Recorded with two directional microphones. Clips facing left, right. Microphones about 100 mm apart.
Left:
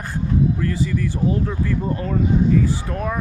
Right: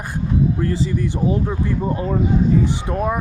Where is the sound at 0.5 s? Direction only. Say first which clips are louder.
Right 1 dB; 30° right (ahead or behind).